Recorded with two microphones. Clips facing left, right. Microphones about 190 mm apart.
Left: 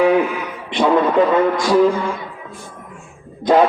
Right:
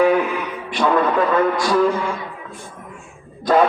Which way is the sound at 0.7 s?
25° left (ahead or behind).